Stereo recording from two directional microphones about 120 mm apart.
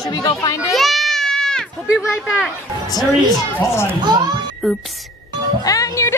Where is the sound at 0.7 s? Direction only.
Centre (ahead or behind).